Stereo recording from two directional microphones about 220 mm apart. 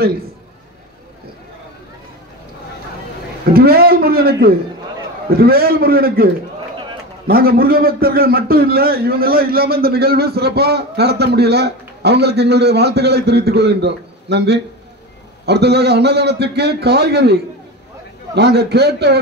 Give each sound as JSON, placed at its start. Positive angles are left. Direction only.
{"t": 3.5, "sound": "a man's voice", "side_deg": -45}
{"t": 7.2, "sound": "a man's voice", "side_deg": -45}